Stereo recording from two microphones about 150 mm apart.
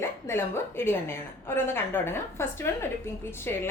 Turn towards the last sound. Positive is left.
turn(degrees=15)  # may be behind; listen again after turning